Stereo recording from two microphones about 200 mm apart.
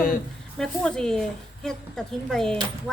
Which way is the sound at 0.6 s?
5° left (ahead or behind).